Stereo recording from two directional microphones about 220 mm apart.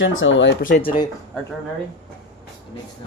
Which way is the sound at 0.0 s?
60° left (ahead or behind).